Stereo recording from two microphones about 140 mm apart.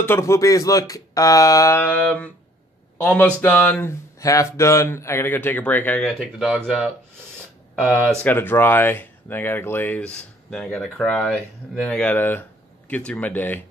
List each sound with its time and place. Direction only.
0.0 s speech: 20° left (ahead or behind)
4.2 s speech: 25° left (ahead or behind)
6.1 s speech: 5° right (ahead or behind)
8.2 s speech: 15° left (ahead or behind)